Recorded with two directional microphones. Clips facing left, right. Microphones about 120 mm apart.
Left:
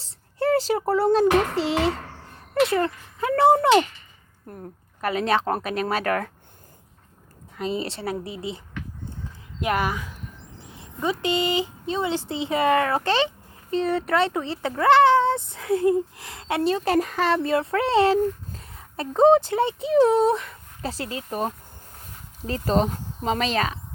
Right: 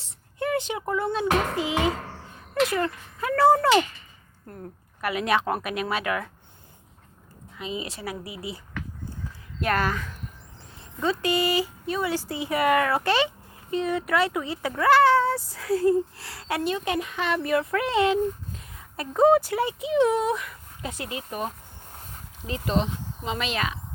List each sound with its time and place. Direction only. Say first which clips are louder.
0.0 s a sound: left 5 dB; 35° left (ahead or behind)
2.6 s speech: left 3 dB; 30° left (ahead or behind)
4.9 s speech: left 2 dB; 35° left (ahead or behind)
7.5 s speech: left 5 dB; 40° left (ahead or behind)
9.6 s speech: left 1 dB; 15° left (ahead or behind); by 23.8 s 35° left (ahead or behind)